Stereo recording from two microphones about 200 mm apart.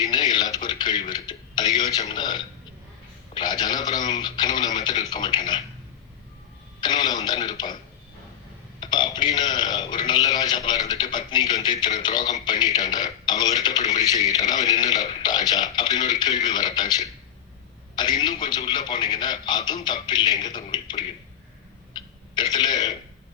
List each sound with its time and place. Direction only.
0.0 s a sound: 20° left (ahead or behind)
2.0 s a man's voice: 20° left (ahead or behind)
6.8 s a man's voice: 20° left (ahead or behind)
8.8 s a man's voice: 20° left (ahead or behind)
21.9 s throat clearing: 20° left (ahead or behind)